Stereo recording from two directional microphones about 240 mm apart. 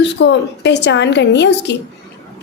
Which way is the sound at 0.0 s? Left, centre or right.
Left.